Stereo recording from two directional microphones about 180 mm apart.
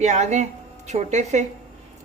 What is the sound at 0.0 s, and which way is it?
Speech, 40° right (ahead or behind).